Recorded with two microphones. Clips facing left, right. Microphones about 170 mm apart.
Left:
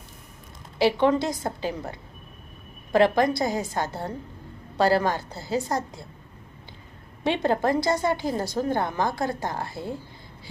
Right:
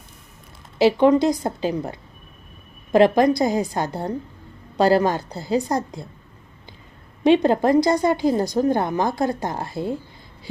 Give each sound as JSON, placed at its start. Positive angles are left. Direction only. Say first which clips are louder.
{"t": 0.8, "sound": "a woman's voice", "louder": "right 6 dB", "side_deg": -20}
{"t": 7.3, "sound": "a woman's voice", "louder": "right 7 dB", "side_deg": -20}